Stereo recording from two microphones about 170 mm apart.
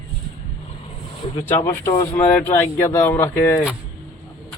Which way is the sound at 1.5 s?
15° left (ahead or behind).